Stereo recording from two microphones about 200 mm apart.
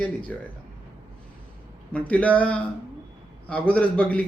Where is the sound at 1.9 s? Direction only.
5° left (ahead or behind).